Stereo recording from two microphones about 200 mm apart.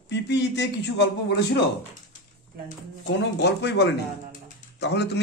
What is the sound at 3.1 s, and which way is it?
A man's voice, 55° left (ahead or behind).